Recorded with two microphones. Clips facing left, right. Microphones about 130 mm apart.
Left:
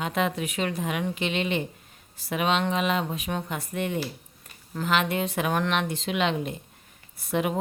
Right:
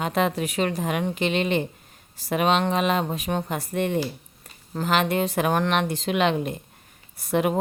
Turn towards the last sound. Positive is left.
turn(degrees=-45)  # may be behind; listen again after turning